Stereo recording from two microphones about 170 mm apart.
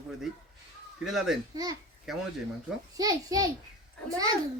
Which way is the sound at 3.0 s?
20° right (ahead or behind).